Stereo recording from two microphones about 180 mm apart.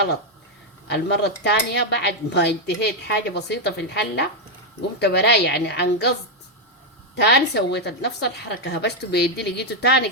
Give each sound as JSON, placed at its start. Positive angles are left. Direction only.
{"t": 0.9, "sound": "speech", "side_deg": 70}
{"t": 7.2, "sound": "speech", "side_deg": 70}